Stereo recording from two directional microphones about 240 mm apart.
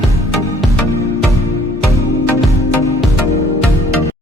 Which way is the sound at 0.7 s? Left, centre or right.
Centre.